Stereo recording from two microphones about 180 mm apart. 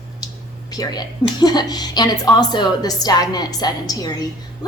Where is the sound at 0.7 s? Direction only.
20° left (ahead or behind).